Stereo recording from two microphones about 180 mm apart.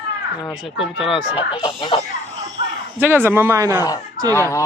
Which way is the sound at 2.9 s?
10° right (ahead or behind).